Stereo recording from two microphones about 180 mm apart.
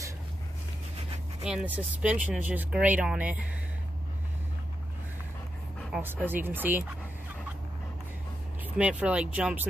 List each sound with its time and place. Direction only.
1.4 s speech: 5° right (ahead or behind)
5.8 s speech: 5° right (ahead or behind)
8.6 s speech: 5° right (ahead or behind)